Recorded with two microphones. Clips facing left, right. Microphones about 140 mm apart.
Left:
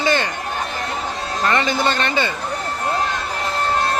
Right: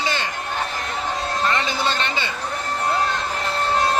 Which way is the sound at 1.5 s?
55° left (ahead or behind).